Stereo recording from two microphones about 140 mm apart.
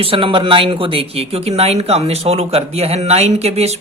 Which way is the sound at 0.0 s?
40° right (ahead or behind).